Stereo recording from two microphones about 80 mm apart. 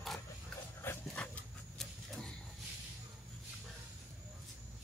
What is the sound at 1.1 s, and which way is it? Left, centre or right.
Dog, centre.